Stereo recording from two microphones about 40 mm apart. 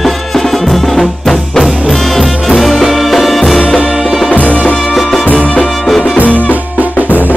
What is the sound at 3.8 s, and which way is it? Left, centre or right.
Music, right.